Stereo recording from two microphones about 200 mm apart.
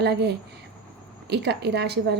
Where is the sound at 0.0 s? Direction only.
55° right (ahead or behind).